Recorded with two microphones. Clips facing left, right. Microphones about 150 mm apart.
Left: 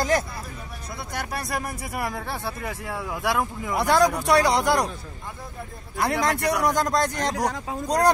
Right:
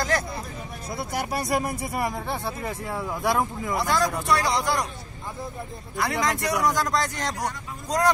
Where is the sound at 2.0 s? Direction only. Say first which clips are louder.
Right 1 dB; 15° right (ahead or behind).